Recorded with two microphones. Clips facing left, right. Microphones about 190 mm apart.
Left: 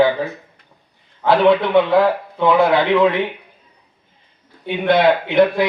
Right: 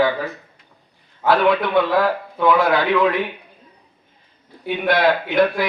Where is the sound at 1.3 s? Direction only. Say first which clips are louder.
Left 3 dB; 25° left (ahead or behind).